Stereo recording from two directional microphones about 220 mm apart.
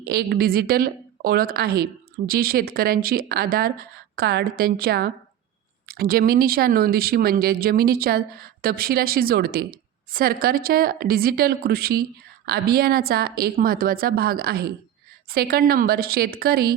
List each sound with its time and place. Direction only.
0.0 s a woman's voice: 45° right (ahead or behind)